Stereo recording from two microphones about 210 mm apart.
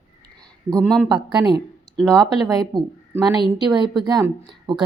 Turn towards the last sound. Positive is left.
turn(degrees=-20)  # may be behind; listen again after turning